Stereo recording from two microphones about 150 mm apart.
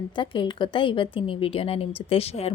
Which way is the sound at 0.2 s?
35° left (ahead or behind).